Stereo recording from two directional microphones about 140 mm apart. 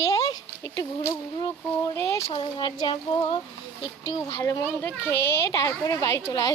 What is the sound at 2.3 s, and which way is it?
Speech, 35° left (ahead or behind).